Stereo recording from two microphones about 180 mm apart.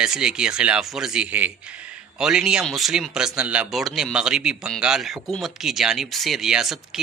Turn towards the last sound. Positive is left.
turn(degrees=0)  # may be behind; listen again after turning